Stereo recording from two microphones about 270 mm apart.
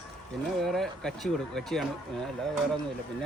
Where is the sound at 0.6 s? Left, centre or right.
Centre.